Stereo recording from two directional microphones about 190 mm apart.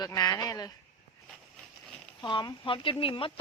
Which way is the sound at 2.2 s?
25° left (ahead or behind).